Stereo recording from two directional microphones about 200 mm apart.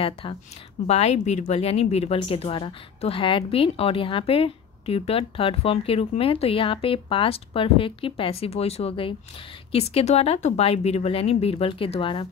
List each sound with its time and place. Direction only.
0.0 s a woman's voice: 25° left (ahead or behind)